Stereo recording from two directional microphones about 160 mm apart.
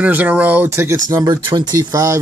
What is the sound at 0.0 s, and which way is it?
Speech, 10° right (ahead or behind).